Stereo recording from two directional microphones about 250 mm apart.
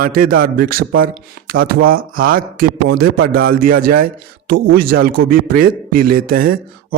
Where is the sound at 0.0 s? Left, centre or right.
Right.